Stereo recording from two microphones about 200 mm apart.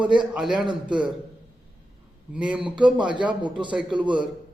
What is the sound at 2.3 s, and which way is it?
Speech, 5° right (ahead or behind).